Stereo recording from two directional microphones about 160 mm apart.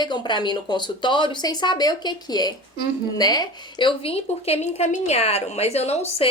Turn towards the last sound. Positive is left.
turn(degrees=40)  # may be behind; listen again after turning